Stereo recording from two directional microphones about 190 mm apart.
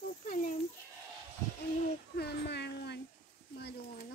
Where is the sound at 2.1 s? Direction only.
60° left (ahead or behind).